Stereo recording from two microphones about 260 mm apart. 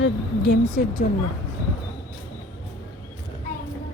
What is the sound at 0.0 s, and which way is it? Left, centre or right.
Speech, left.